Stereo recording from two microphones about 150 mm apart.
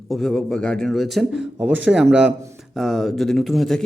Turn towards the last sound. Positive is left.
turn(degrees=0)  # may be behind; listen again after turning